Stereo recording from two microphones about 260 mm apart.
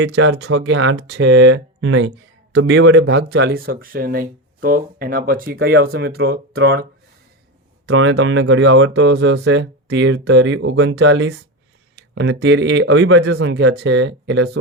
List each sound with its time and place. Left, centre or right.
0.0 s speech: right
7.9 s speech: right